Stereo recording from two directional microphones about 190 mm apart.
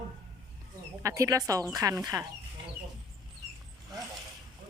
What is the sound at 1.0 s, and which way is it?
Speech, 15° right (ahead or behind).